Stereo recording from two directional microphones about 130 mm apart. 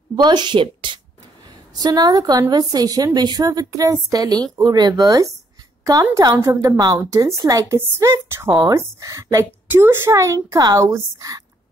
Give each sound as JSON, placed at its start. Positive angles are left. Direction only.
{"t": 0.1, "sound": "a woman's voice", "side_deg": -35}
{"t": 6.4, "sound": "a woman's voice", "side_deg": -25}
{"t": 8.5, "sound": "a woman's voice", "side_deg": -30}